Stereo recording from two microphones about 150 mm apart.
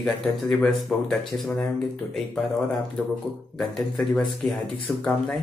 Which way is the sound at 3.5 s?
5° left (ahead or behind).